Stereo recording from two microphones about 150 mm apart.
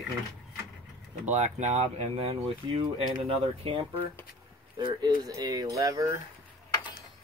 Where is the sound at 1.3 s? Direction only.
50° right (ahead or behind).